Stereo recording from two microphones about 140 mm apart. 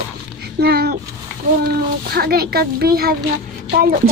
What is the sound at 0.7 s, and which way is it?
Speech, 90° right.